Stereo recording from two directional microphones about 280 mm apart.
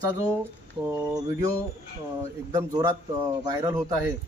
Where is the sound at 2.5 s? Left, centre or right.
Centre.